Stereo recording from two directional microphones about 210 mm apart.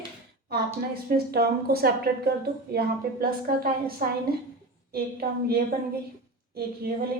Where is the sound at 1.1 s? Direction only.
45° right (ahead or behind).